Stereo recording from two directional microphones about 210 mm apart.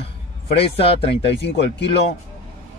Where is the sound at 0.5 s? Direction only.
25° left (ahead or behind).